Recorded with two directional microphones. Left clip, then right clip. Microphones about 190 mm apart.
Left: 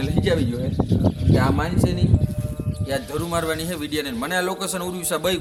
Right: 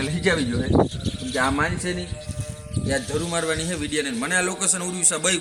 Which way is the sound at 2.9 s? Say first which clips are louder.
Even; 20° left (ahead or behind).